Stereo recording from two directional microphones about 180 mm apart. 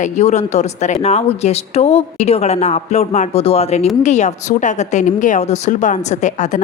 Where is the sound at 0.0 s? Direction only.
40° left (ahead or behind).